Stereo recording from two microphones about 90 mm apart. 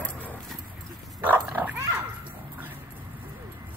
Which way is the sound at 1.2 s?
20° right (ahead or behind).